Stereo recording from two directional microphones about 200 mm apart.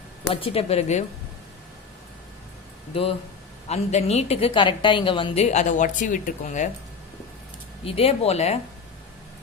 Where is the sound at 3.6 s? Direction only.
30° left (ahead or behind).